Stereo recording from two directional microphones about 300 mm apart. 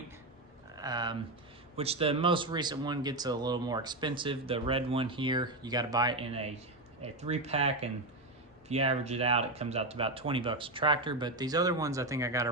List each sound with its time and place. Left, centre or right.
0.8 s speech: centre